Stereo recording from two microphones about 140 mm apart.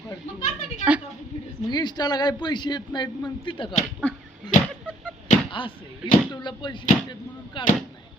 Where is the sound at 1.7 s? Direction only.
30° left (ahead or behind).